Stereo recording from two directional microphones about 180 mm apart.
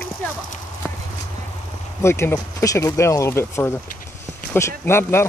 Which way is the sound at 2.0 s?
15° left (ahead or behind).